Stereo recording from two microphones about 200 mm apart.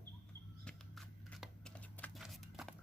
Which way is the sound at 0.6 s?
5° left (ahead or behind).